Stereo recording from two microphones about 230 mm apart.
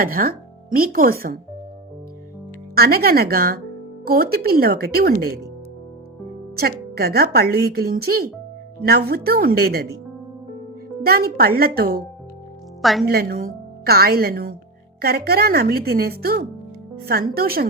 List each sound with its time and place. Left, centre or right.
0.0 s speech: right
2.7 s a woman's voice: right
6.6 s a woman's voice: right
11.0 s a woman's voice: right
12.8 s a woman's voice: centre
13.1 s a woman's voice: right